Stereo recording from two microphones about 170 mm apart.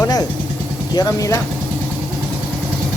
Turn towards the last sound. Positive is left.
turn(degrees=20)  # may be behind; listen again after turning